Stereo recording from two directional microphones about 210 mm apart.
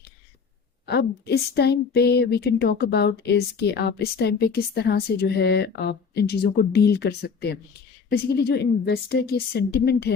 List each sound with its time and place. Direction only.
0.9 s speech: 50° left (ahead or behind)